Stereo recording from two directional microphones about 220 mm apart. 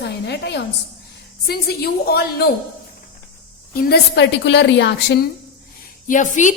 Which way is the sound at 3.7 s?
50° left (ahead or behind).